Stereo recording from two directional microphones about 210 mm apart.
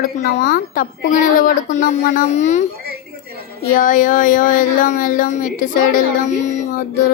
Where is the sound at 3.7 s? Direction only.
40° left (ahead or behind).